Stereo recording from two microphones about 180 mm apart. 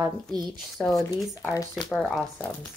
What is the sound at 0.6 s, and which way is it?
Speech, centre (ahead or behind).